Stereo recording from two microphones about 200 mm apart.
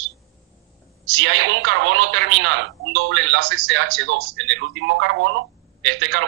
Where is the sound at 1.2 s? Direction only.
70° right (ahead or behind).